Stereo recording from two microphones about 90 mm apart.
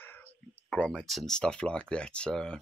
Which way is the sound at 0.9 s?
Centre (ahead or behind).